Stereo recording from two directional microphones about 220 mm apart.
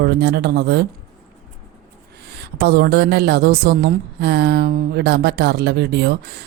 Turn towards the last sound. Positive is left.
turn(degrees=-50)  # may be behind; listen again after turning